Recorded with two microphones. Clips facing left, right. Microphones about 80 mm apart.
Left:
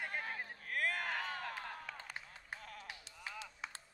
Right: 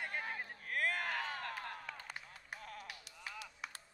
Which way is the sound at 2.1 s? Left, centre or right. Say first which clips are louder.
Left 1 dB; left.